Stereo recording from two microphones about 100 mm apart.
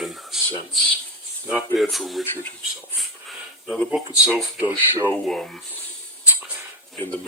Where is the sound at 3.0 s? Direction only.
Centre (ahead or behind).